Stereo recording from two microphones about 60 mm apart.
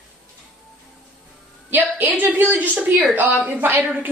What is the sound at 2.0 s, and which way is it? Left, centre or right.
A woman's voice, right.